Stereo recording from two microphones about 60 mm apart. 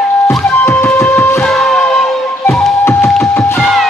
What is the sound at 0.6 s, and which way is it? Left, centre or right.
Music, left.